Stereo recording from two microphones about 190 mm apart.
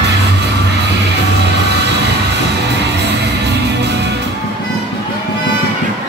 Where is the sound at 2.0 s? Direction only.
65° right (ahead or behind).